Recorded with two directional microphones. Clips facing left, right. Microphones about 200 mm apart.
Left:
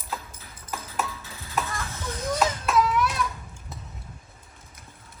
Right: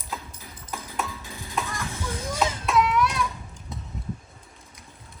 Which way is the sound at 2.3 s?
Centre (ahead or behind).